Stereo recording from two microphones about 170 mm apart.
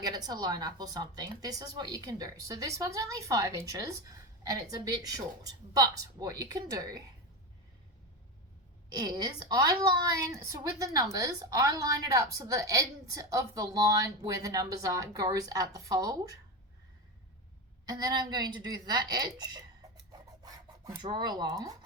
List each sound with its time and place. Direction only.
0.0 s a woman's voice: 25° right (ahead or behind)
9.0 s a woman's voice: 25° right (ahead or behind)
17.8 s a woman's voice: 25° right (ahead or behind)
20.4 s rub: 25° right (ahead or behind)